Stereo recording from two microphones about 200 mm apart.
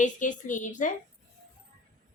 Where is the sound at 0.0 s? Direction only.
40° left (ahead or behind).